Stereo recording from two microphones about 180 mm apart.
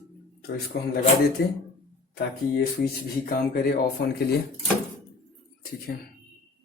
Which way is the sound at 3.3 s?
55° left (ahead or behind).